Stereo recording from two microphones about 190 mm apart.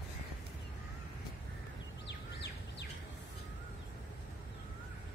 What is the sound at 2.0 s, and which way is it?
Bird, 65° left (ahead or behind).